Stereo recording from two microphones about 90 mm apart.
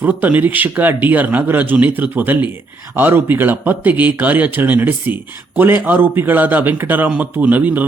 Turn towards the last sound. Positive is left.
turn(degrees=-20)  # may be behind; listen again after turning